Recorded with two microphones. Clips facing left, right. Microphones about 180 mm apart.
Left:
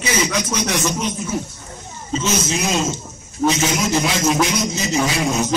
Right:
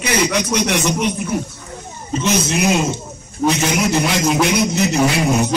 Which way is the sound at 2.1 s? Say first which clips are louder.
Right 3 dB; 60° right (ahead or behind).